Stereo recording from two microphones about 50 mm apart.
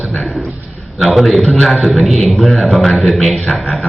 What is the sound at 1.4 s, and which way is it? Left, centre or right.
Speech, left.